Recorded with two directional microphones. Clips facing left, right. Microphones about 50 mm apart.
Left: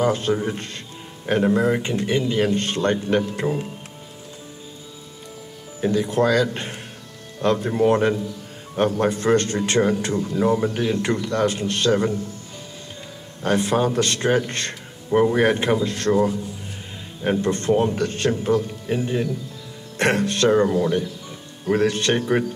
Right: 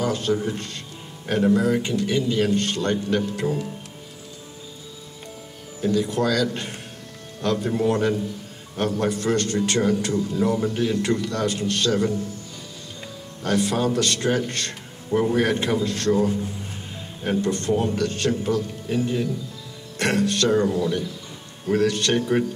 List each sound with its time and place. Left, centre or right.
0.0 s a man's voice: left
5.8 s a man's voice: left
13.4 s a man's voice: left